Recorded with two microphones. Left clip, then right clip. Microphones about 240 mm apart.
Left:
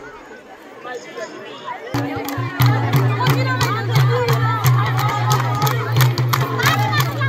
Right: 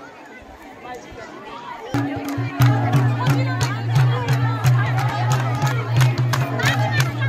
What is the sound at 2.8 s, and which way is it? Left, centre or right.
Music, left.